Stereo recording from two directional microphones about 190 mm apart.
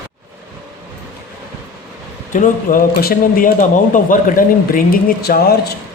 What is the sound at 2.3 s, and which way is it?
Speech, 45° left (ahead or behind).